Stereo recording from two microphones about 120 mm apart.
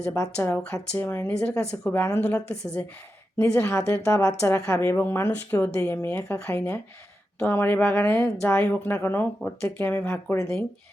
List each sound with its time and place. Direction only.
0.1 s a woman's voice: 25° left (ahead or behind)